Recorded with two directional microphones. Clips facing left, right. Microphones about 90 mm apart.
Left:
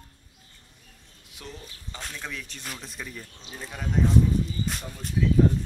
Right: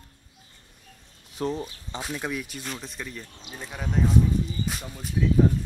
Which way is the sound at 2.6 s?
Centre (ahead or behind).